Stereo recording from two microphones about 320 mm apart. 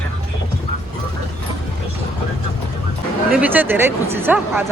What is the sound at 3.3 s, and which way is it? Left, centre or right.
Speech, centre.